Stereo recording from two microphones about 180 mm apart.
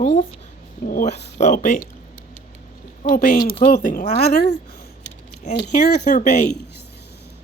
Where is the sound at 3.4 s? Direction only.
30° left (ahead or behind).